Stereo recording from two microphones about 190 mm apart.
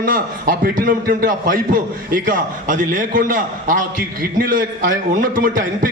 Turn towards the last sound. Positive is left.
turn(degrees=-45)  # may be behind; listen again after turning